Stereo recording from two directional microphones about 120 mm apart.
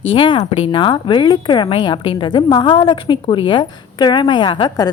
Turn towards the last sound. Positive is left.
turn(degrees=40)  # may be behind; listen again after turning